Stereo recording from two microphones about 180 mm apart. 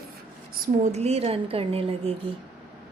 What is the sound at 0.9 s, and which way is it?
A woman's voice, 35° right (ahead or behind).